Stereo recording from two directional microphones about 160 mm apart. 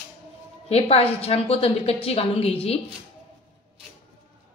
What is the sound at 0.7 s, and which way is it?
A woman's voice, 40° left (ahead or behind).